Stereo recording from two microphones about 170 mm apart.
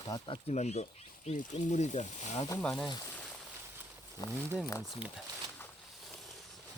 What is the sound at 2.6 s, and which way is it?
Speech, 5° left (ahead or behind).